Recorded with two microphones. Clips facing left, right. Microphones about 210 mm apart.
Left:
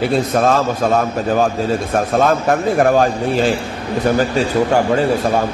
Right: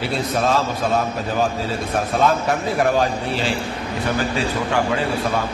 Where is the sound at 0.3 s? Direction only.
50° left (ahead or behind).